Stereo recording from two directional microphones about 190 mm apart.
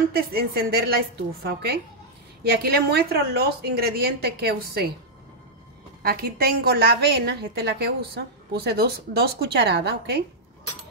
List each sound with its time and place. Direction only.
0.1 s a woman's voice: 55° right (ahead or behind)
6.0 s a woman's voice: 55° right (ahead or behind)